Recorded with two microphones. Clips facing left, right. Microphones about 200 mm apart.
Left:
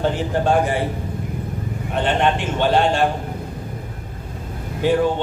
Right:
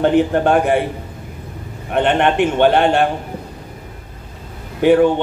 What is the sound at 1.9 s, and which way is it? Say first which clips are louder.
A man's voice: right 4 dB; 60° right (ahead or behind).